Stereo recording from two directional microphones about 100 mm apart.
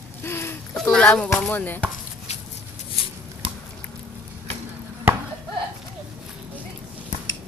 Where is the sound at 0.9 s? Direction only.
10° left (ahead or behind).